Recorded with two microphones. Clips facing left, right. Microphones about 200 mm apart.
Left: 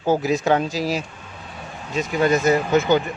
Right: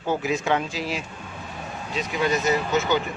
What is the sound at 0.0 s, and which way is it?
Speech, 40° left (ahead or behind).